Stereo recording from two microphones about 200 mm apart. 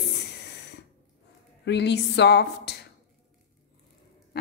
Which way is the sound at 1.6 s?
60° left (ahead or behind).